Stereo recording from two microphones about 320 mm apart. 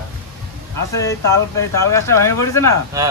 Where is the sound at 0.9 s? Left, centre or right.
Centre.